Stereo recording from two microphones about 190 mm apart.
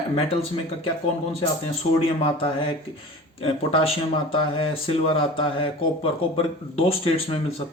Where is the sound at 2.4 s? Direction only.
30° left (ahead or behind).